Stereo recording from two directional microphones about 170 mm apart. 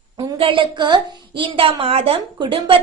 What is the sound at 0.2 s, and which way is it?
A woman's voice, 30° right (ahead or behind).